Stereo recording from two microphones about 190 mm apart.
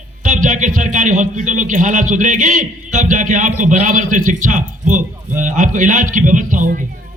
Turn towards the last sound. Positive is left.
turn(degrees=-45)  # may be behind; listen again after turning